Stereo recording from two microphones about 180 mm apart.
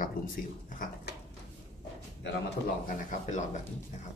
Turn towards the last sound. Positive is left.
turn(degrees=45)  # may be behind; listen again after turning